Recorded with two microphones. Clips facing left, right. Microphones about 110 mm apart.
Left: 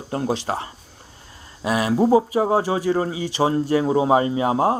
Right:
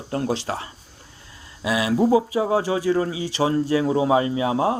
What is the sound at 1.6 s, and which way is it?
Speech, 40° left (ahead or behind).